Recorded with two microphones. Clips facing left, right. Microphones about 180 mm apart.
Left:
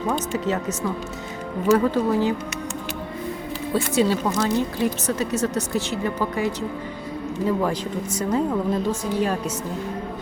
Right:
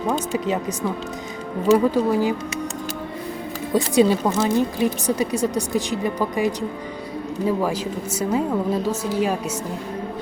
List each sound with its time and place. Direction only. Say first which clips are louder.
0.1 s speech: right 1 dB; 15° right (ahead or behind)
3.7 s speech: right 4 dB; 15° right (ahead or behind)